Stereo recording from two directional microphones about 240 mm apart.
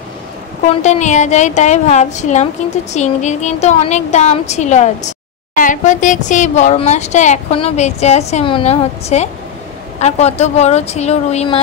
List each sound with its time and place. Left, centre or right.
0.8 s speech: left